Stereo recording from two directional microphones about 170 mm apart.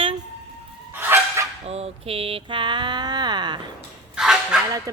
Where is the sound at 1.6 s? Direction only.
35° right (ahead or behind).